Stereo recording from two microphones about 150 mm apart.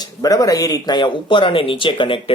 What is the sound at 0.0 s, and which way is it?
Speech, 25° left (ahead or behind).